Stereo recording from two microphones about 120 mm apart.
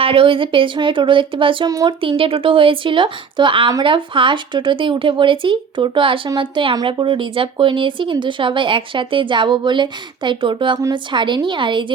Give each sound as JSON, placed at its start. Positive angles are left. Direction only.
{"t": 0.0, "sound": "a woman's voice", "side_deg": -50}